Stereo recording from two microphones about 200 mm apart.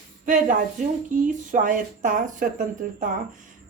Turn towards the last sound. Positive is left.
turn(degrees=-40)  # may be behind; listen again after turning